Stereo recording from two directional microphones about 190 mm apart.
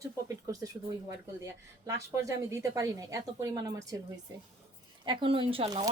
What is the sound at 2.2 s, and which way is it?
Speech, 15° right (ahead or behind).